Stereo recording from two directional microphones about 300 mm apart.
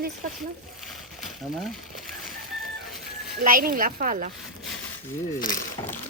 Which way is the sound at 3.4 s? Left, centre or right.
Right.